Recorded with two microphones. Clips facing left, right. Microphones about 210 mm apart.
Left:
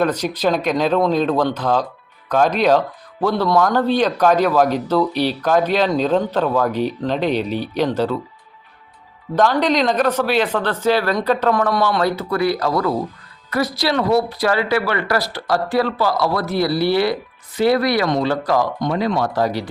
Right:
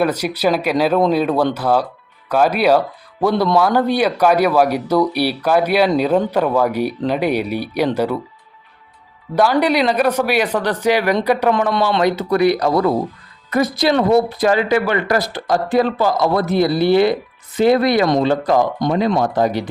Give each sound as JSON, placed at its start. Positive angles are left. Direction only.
{"t": 0.0, "sound": "speech", "side_deg": -10}
{"t": 9.3, "sound": "speech", "side_deg": -10}